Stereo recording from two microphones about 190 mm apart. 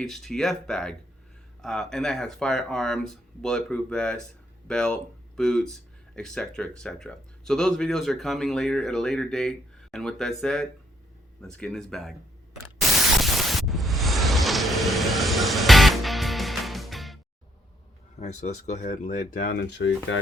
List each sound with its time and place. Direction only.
0.0 s speech: centre (ahead or behind)
13.2 s vehicle: centre (ahead or behind)
18.2 s speech: 40° left (ahead or behind); by 19.9 s 70° left (ahead or behind)